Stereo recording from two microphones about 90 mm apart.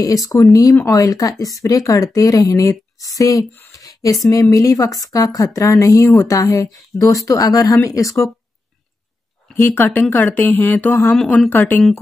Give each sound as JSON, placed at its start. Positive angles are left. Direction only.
{"t": 0.0, "sound": "speech", "side_deg": 40}
{"t": 9.5, "sound": "speech", "side_deg": 25}